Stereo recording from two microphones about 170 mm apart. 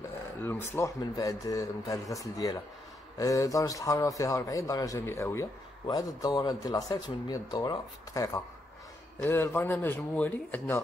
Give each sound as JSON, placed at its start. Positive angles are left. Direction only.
{"t": 0.4, "sound": "speech", "side_deg": 10}